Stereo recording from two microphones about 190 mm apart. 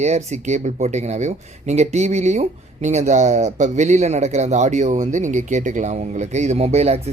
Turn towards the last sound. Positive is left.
turn(degrees=-35)  # may be behind; listen again after turning